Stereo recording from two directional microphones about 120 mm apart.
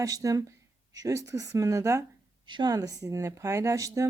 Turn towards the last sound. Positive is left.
turn(degrees=-25)  # may be behind; listen again after turning